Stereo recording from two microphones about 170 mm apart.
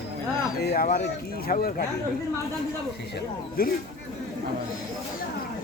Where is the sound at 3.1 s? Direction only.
60° left (ahead or behind).